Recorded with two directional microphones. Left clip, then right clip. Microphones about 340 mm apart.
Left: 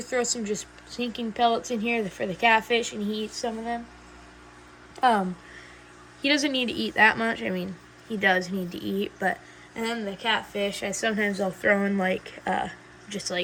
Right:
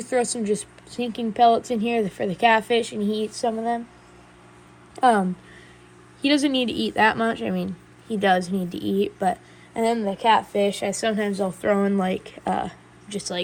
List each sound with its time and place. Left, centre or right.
0.0 s speech: centre
4.9 s speech: centre
6.2 s speech: centre